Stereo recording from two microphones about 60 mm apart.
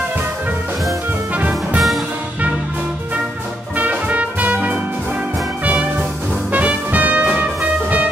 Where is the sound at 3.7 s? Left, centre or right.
Right.